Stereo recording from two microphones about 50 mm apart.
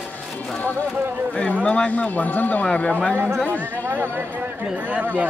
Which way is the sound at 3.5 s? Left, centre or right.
Right.